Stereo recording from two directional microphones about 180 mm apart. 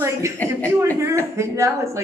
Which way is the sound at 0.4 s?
10° left (ahead or behind).